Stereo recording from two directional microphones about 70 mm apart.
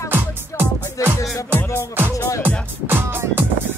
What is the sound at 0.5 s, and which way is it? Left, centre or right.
Music, left.